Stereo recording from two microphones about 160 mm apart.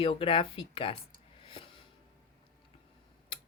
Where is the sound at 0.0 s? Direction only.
35° left (ahead or behind).